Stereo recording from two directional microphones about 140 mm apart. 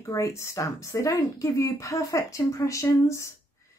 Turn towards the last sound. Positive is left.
turn(degrees=20)  # may be behind; listen again after turning